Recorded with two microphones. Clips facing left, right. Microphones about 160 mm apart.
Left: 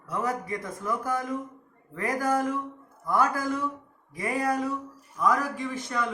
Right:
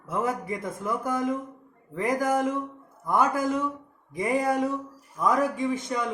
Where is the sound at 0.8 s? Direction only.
20° right (ahead or behind).